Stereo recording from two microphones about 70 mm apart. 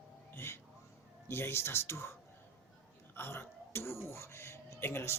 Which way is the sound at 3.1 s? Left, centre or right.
Left.